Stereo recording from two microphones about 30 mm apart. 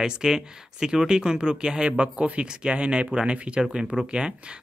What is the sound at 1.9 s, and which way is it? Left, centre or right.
Speech, right.